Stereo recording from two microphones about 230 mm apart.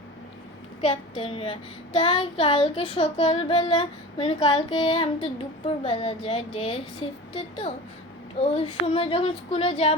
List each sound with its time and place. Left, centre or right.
0.8 s child singing: left